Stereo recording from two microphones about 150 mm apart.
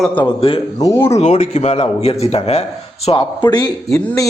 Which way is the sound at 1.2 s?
50° left (ahead or behind).